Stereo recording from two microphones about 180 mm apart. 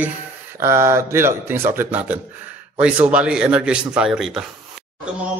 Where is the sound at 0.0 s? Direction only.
15° right (ahead or behind).